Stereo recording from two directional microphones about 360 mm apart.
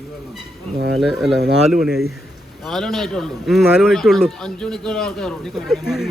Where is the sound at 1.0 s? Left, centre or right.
Centre.